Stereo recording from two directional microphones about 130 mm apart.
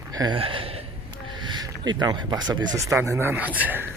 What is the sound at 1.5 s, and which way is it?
Speech, 35° right (ahead or behind).